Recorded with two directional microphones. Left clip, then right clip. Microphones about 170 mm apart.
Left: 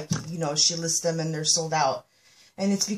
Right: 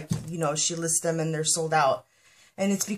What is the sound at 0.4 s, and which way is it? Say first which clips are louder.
A woman's voice: left 2 dB; 40° right (ahead or behind).